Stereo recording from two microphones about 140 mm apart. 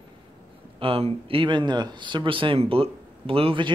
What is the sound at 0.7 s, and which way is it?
Speech, 40° right (ahead or behind).